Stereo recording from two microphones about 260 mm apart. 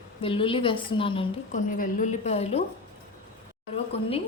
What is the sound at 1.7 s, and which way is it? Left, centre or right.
Speech, left.